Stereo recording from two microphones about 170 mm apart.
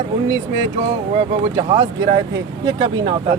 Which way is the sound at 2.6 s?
30° right (ahead or behind).